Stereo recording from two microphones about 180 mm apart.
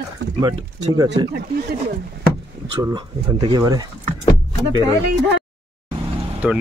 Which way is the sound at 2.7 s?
25° right (ahead or behind).